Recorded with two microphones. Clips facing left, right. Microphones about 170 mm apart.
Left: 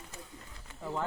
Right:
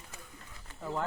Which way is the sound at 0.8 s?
5° left (ahead or behind).